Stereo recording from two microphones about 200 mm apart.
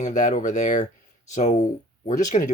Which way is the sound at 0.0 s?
40° left (ahead or behind).